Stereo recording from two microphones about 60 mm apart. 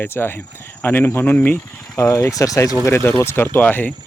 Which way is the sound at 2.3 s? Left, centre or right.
Left.